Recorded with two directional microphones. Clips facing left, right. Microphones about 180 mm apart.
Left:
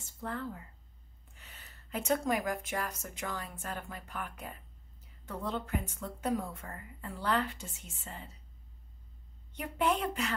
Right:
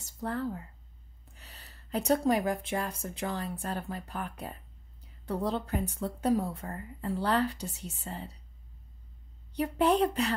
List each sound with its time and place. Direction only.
0.0 s a sound: 40° right (ahead or behind)
1.3 s speech: 35° right (ahead or behind)
9.5 s speech: 35° right (ahead or behind)